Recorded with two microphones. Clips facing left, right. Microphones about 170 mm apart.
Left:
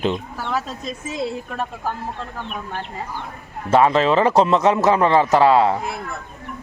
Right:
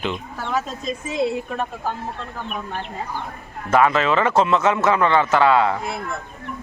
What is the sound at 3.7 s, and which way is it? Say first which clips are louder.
A man's voice: left 2 dB; 30° left (ahead or behind).